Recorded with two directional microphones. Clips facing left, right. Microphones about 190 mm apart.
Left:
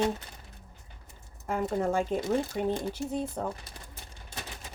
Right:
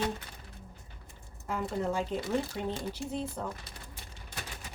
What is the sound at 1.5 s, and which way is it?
Speech, 45° left (ahead or behind).